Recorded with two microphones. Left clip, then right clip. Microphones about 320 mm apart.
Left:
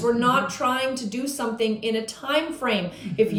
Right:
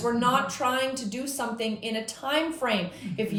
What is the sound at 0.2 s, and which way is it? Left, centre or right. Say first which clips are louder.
A woman's voice: left 3 dB; centre.